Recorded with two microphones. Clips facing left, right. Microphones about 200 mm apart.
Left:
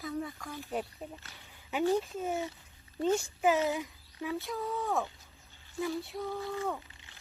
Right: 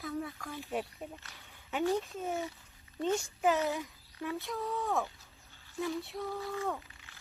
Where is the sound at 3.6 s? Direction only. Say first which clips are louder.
Left 2 dB; 15° left (ahead or behind).